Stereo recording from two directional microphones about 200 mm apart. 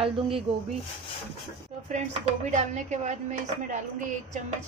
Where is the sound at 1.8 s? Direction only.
35° right (ahead or behind).